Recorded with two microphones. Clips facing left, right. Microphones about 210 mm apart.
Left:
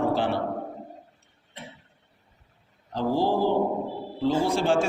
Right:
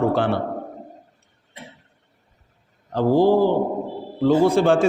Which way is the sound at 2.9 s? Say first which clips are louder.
Right 8 dB; 55° right (ahead or behind).